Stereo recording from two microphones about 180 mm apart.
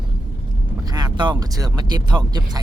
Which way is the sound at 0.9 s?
25° right (ahead or behind).